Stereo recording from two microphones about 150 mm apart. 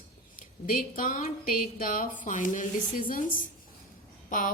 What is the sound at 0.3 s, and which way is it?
A woman's voice, 65° left (ahead or behind).